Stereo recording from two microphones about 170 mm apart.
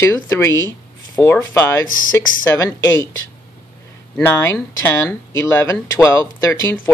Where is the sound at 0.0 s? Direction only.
15° left (ahead or behind).